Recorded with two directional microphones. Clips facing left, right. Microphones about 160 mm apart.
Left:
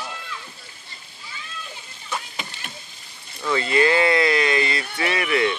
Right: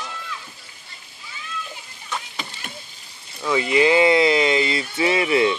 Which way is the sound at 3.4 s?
15° right (ahead or behind).